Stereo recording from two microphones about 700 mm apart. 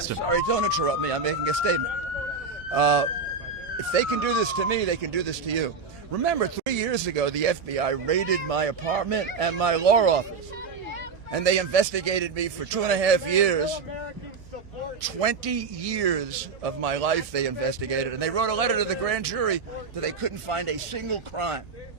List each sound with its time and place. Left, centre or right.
0.3 s a man's voice: right
11.3 s a man's voice: right
15.2 s a man's voice: right